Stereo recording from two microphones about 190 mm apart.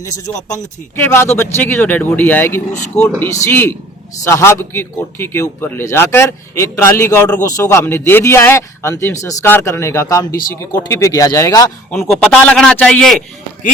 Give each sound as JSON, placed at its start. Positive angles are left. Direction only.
{"t": 0.1, "sound": "a man's voice", "side_deg": 20}
{"t": 11.9, "sound": "a man's voice", "side_deg": 5}